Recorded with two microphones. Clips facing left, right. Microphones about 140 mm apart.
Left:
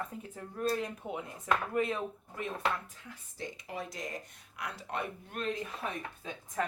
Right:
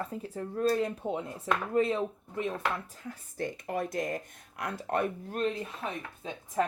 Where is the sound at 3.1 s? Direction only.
55° right (ahead or behind).